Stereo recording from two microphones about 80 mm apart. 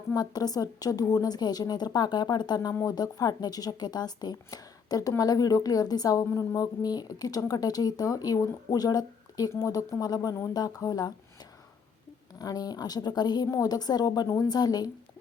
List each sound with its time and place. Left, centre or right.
0.1 s a woman's voice: left
6.8 s a woman's voice: left
12.4 s a woman's voice: left